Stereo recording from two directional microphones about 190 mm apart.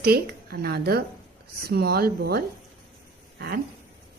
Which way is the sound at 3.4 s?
55° right (ahead or behind).